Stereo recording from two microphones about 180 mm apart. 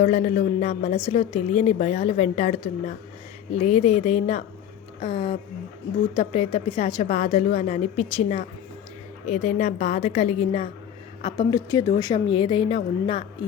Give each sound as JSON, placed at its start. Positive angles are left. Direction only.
{"t": 0.0, "sound": "a woman's voice", "side_deg": 45}